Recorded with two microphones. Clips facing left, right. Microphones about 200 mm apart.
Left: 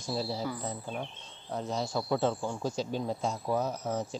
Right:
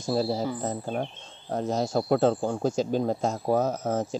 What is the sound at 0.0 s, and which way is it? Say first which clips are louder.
Speech: right 7 dB; 50° right (ahead or behind).